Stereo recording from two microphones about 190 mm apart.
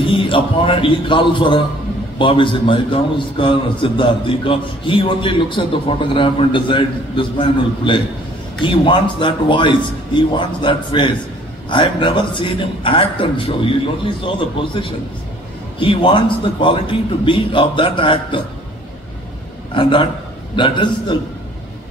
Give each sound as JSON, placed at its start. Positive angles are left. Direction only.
{"t": 0.0, "sound": "a man's voice", "side_deg": 25}
{"t": 19.7, "sound": "a man's voice", "side_deg": 25}